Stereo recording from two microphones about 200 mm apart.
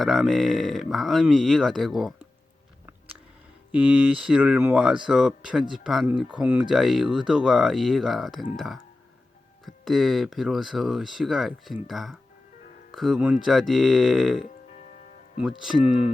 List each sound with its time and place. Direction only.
0.0 s speech: centre (ahead or behind)
3.7 s speech: 5° right (ahead or behind)